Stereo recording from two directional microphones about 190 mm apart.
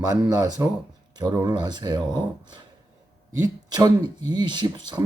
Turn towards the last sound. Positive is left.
turn(degrees=-20)  # may be behind; listen again after turning